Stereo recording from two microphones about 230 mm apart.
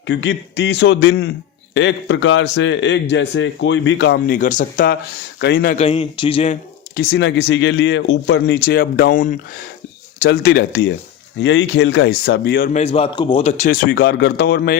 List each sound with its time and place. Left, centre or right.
0.1 s speech: left
4.4 s speech: left
5.4 s speech: left
5.7 s speech: left
6.9 s speech: left